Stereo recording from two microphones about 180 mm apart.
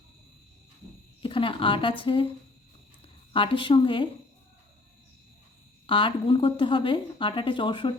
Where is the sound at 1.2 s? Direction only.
30° left (ahead or behind).